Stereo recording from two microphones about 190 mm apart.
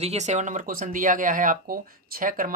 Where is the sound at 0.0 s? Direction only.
35° right (ahead or behind).